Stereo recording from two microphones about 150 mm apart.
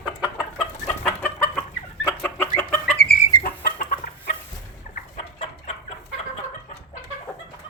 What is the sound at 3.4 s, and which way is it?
Chicken, 80° left.